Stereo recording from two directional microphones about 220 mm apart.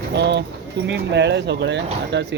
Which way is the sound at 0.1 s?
50° right (ahead or behind).